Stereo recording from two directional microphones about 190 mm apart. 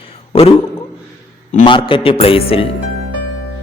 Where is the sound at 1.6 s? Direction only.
25° left (ahead or behind).